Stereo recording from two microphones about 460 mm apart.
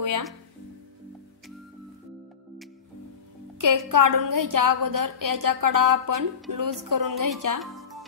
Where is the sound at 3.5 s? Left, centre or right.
Right.